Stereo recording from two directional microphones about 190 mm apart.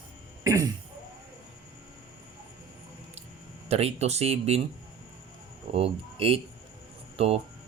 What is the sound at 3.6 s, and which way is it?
Speech, 35° right (ahead or behind).